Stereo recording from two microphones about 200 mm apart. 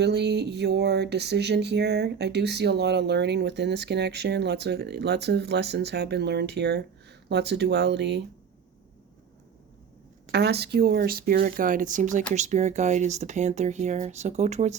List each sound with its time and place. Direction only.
0.0 s speech: 55° right (ahead or behind)
10.3 s speech: 55° right (ahead or behind); by 14.8 s 35° right (ahead or behind)